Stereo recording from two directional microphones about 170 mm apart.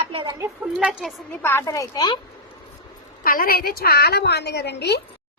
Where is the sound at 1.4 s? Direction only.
15° left (ahead or behind).